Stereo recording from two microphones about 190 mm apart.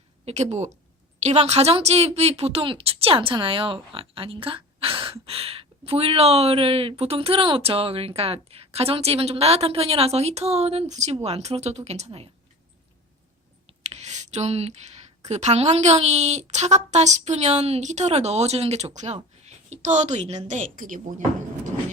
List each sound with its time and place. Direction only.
0.3 s a woman's voice: 35° right (ahead or behind)
13.7 s a sound: 35° right (ahead or behind)
15.3 s speech: 35° right (ahead or behind)